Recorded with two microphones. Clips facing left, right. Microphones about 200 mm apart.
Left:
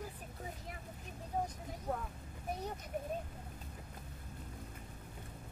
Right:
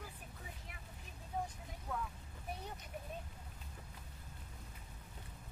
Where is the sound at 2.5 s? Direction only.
45° left (ahead or behind).